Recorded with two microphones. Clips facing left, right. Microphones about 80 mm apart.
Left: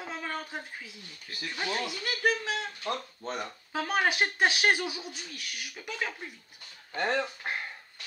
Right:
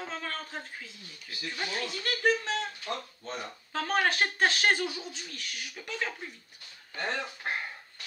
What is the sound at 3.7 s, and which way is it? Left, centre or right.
Speech, centre.